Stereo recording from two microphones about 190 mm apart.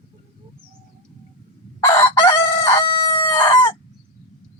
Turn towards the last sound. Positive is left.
turn(degrees=15)  # may be behind; listen again after turning